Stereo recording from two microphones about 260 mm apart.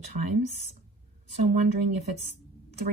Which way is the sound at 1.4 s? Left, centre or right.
Right.